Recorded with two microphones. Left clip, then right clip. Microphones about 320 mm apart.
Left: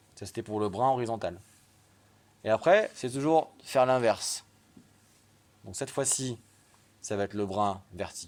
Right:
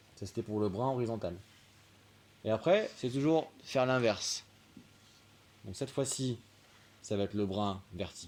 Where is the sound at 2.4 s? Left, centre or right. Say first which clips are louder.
Left 6 dB; left.